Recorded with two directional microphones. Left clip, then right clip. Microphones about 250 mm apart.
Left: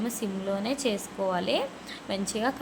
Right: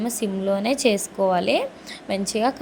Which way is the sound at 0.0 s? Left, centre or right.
Centre.